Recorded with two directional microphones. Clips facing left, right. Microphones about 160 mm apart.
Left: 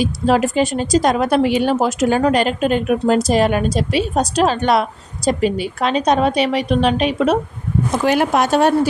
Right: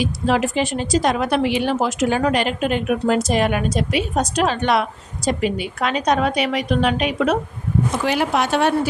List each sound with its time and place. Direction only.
0.0 s speech: 40° left (ahead or behind)
8.0 s a woman's voice: 50° left (ahead or behind)